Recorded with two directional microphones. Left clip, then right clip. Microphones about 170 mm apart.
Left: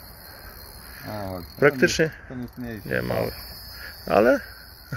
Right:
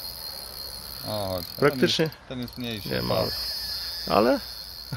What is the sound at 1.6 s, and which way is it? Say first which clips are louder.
Speech: left 3 dB; 5° right (ahead or behind).